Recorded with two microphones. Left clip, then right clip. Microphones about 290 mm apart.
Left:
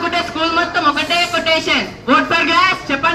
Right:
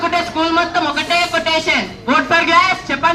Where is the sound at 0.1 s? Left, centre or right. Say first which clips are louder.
Right 1 dB; right.